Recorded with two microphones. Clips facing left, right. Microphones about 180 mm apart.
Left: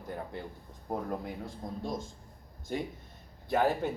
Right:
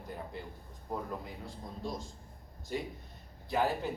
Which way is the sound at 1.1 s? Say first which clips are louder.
Left 5 dB; 50° left (ahead or behind).